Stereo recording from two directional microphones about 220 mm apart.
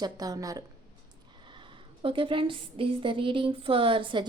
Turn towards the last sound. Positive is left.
turn(degrees=-25)  # may be behind; listen again after turning